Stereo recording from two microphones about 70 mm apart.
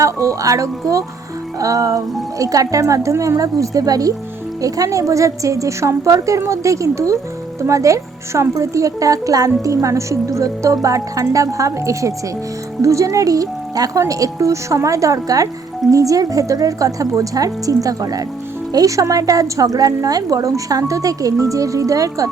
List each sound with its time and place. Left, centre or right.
0.0 s a woman's voice: right